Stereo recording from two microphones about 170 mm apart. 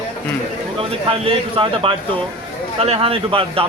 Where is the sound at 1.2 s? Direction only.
30° right (ahead or behind).